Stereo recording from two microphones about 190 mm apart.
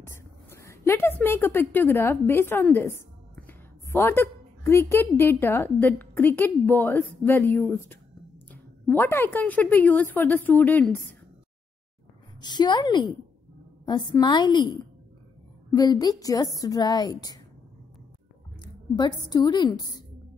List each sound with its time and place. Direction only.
0.0 s a woman's voice: 15° left (ahead or behind)
12.4 s a woman's voice: 20° left (ahead or behind)
15.7 s a woman's voice: 20° left (ahead or behind)
18.6 s a woman's voice: 20° left (ahead or behind)